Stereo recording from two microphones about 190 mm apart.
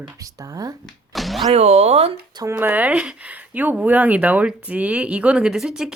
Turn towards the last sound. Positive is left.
turn(degrees=-5)  # may be behind; listen again after turning